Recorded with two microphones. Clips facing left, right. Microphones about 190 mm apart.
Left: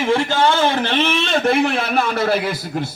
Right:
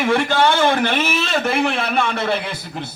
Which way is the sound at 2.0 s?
40° left (ahead or behind).